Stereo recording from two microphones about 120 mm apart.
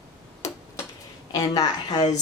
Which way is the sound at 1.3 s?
30° left (ahead or behind).